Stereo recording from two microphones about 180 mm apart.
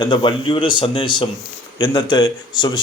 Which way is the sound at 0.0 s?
25° left (ahead or behind).